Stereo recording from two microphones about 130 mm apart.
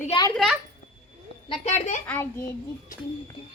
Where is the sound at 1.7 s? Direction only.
70° left (ahead or behind).